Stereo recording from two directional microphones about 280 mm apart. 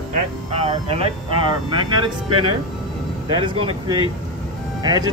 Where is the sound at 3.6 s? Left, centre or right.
Centre.